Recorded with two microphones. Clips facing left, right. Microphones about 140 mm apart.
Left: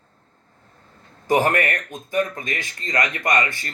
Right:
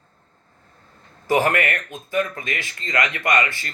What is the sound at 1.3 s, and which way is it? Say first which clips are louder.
Speech: even; 20° left (ahead or behind).